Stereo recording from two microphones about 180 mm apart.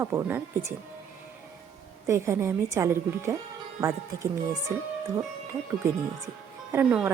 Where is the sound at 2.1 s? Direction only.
15° right (ahead or behind).